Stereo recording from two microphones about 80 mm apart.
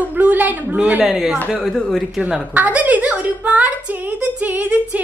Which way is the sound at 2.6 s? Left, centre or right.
Centre.